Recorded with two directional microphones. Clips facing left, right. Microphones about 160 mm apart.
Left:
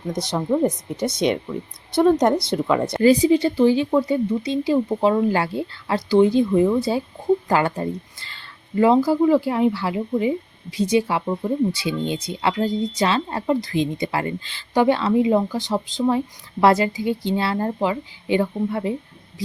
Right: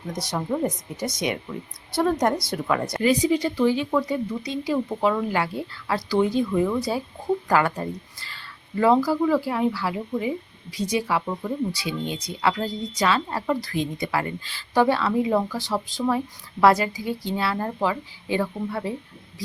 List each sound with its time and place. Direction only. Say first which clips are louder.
0.1 s a woman's voice: left 5 dB; 25° left (ahead or behind)
1.5 s a woman's voice: left 5 dB; 10° left (ahead or behind)
1.9 s a woman's voice: left 5 dB; 20° left (ahead or behind)